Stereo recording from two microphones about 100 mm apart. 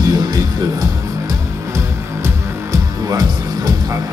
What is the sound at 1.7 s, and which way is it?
Music, 35° right (ahead or behind).